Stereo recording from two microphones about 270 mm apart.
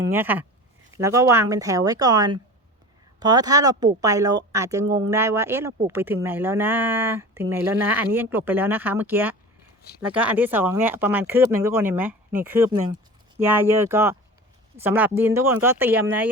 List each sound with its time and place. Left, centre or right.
0.1 s speech: centre